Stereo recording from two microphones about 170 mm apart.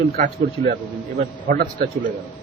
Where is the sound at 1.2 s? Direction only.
65° right (ahead or behind).